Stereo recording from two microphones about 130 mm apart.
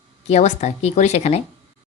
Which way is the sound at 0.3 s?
60° left (ahead or behind).